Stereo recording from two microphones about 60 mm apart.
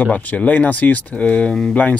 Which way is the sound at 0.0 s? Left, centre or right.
Left.